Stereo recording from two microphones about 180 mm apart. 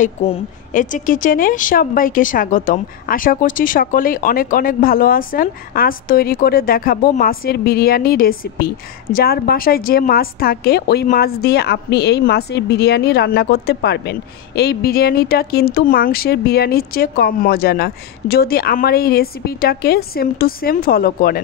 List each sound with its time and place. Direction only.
0.0 s a woman's voice: 40° left (ahead or behind); by 21.4 s 55° left (ahead or behind)